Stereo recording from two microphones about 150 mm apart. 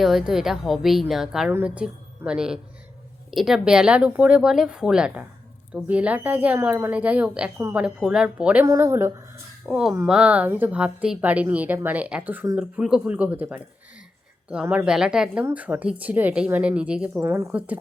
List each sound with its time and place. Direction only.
0.0 s a woman's voice: centre (ahead or behind)
8.6 s a woman's voice: 20° right (ahead or behind)
9.6 s a woman's voice: 5° right (ahead or behind)